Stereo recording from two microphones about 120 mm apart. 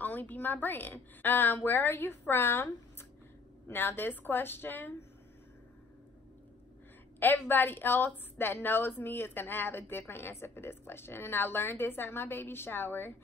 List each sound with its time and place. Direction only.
0.0 s a woman's voice: 15° left (ahead or behind)
7.2 s a woman's voice: 15° left (ahead or behind)